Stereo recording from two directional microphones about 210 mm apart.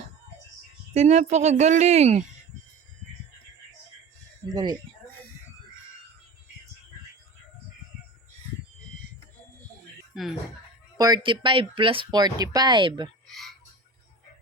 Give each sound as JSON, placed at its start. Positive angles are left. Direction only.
{"t": 0.9, "sound": "speech", "side_deg": -35}
{"t": 4.4, "sound": "speech", "side_deg": -20}
{"t": 10.9, "sound": "speech", "side_deg": -20}
{"t": 13.2, "sound": "a sound", "side_deg": 0}